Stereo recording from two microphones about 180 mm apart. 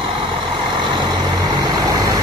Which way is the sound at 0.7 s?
25° right (ahead or behind).